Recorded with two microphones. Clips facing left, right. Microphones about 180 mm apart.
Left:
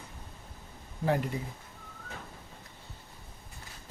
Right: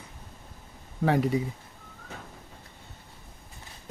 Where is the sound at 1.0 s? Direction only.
75° right (ahead or behind).